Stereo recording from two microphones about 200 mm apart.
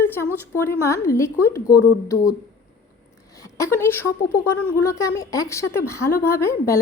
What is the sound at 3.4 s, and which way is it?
A woman's voice, 15° left (ahead or behind).